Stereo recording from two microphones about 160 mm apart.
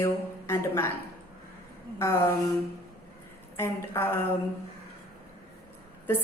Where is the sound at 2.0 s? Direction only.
15° left (ahead or behind).